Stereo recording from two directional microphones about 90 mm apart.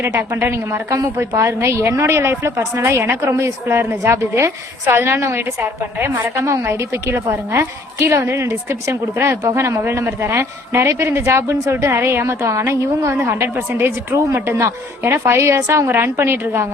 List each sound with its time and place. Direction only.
0.2 s a woman's voice: 30° right (ahead or behind)